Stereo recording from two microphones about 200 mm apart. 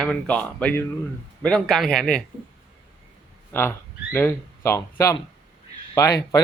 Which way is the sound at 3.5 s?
10° left (ahead or behind).